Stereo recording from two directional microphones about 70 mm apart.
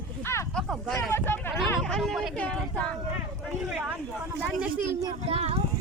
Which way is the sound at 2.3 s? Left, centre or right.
Centre.